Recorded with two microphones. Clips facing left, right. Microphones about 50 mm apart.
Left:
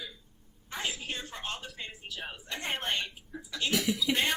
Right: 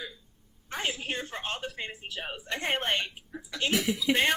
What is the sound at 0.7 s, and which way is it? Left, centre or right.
A woman's voice, right.